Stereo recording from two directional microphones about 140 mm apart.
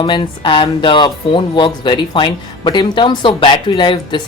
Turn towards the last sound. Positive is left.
turn(degrees=35)  # may be behind; listen again after turning